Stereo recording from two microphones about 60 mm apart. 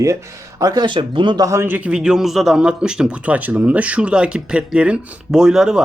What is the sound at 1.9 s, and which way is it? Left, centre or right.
Speech, centre.